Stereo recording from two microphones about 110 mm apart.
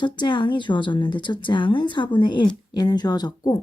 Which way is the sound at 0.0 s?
45° left (ahead or behind).